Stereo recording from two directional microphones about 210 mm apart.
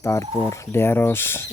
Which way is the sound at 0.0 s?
15° left (ahead or behind).